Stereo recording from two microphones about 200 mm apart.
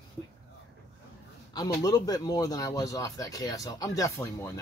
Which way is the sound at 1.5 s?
20° left (ahead or behind).